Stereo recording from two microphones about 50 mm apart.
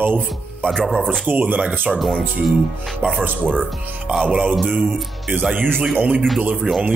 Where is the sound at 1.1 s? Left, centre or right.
Right.